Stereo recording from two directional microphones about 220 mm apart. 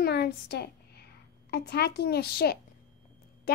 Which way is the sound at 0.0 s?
45° left (ahead or behind).